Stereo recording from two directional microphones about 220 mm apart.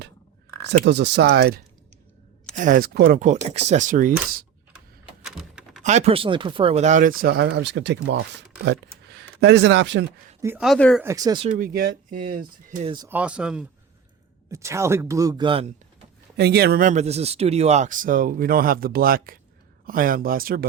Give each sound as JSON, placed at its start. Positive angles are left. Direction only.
{"t": 0.7, "sound": "speech", "side_deg": -50}
{"t": 2.6, "sound": "speech", "side_deg": -35}
{"t": 5.2, "sound": "typing", "side_deg": 0}
{"t": 5.8, "sound": "speech", "side_deg": -30}
{"t": 10.4, "sound": "speech", "side_deg": -5}
{"t": 11.0, "sound": "speech", "side_deg": -15}
{"t": 11.4, "sound": "speech", "side_deg": -40}
{"t": 13.1, "sound": "speech", "side_deg": -5}
{"t": 16.4, "sound": "speech", "side_deg": -45}